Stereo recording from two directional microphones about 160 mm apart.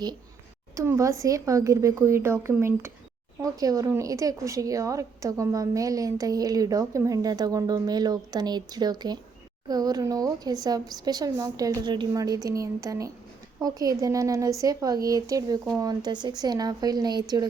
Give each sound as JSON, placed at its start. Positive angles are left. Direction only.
{"t": 0.8, "sound": "a woman's voice", "side_deg": -20}